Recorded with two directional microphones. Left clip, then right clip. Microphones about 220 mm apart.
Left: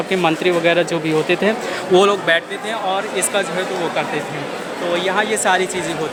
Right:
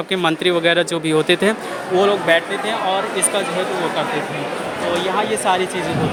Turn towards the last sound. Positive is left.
turn(degrees=15)  # may be behind; listen again after turning